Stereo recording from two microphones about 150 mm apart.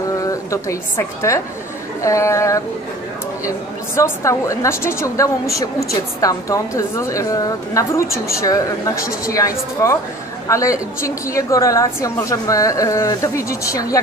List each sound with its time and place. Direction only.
0.2 s a woman's voice: 20° left (ahead or behind)